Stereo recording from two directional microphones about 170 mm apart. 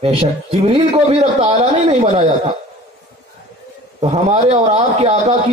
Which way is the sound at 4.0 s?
40° right (ahead or behind).